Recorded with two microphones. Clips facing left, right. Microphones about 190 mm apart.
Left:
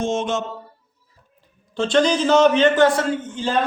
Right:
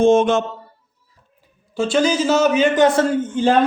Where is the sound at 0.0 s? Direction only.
55° right (ahead or behind).